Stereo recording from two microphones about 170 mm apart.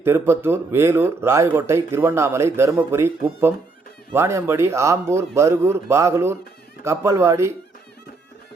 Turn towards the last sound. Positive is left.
turn(degrees=-15)  # may be behind; listen again after turning